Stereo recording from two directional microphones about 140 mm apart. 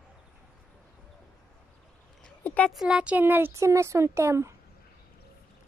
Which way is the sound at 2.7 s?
5° right (ahead or behind).